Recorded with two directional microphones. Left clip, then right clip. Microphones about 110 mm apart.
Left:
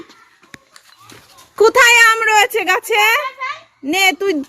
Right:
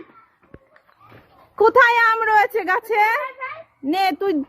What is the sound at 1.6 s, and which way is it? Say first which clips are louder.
A woman's voice: left 5 dB; 20° left (ahead or behind).